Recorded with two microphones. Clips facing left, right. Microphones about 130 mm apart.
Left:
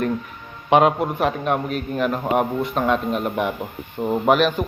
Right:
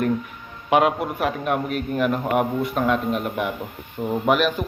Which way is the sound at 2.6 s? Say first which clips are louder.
Left 1 dB; 25° left (ahead or behind).